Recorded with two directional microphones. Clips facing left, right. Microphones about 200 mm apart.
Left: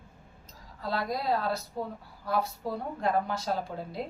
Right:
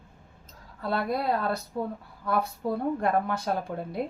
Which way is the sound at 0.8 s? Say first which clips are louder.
Right 4 dB; 60° right (ahead or behind).